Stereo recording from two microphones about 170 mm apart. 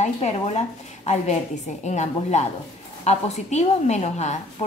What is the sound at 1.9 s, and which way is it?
A woman's voice, 45° left (ahead or behind).